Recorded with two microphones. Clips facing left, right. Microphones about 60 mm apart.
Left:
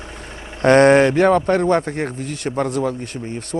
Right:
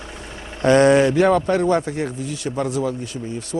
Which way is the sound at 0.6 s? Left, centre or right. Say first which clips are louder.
Left 2 dB; left.